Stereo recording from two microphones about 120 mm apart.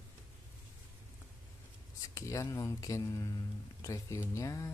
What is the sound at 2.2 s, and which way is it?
Speech, 25° left (ahead or behind).